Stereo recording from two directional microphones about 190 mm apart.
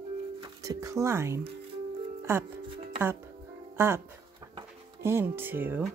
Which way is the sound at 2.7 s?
30° right (ahead or behind).